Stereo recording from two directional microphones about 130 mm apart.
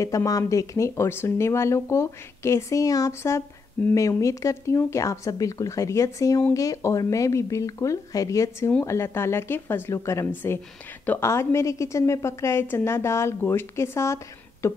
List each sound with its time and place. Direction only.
0.0 s speech: 25° left (ahead or behind)